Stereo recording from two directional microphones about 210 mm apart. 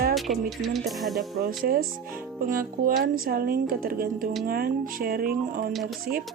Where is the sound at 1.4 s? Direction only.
45° right (ahead or behind).